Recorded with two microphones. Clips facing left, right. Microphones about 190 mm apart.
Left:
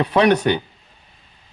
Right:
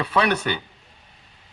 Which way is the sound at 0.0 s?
20° left (ahead or behind).